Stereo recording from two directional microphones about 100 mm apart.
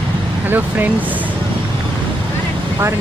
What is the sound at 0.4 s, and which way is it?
Speech, 20° right (ahead or behind).